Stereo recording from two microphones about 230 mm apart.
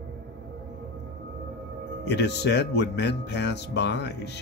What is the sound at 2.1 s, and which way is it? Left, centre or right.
Speech, left.